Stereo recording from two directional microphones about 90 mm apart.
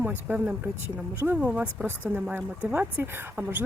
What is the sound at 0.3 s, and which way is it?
Speech, 20° right (ahead or behind).